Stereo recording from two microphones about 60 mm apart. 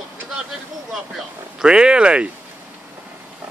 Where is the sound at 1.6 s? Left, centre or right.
Centre.